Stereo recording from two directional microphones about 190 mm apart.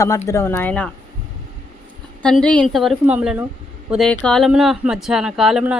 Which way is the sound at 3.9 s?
5° left (ahead or behind).